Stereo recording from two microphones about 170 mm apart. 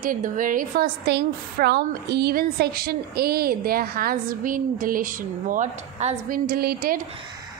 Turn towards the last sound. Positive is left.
turn(degrees=-65)  # may be behind; listen again after turning